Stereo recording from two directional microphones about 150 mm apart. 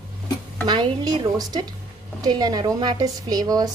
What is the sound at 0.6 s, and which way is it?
Speech, 30° right (ahead or behind).